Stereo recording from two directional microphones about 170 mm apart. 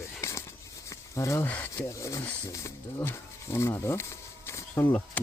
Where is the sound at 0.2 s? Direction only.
15° left (ahead or behind).